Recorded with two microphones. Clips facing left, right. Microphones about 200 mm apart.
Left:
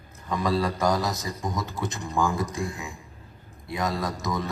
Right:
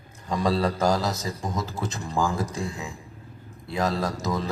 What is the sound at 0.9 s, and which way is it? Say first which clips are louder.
Speech: right 1 dB; 15° left (ahead or behind).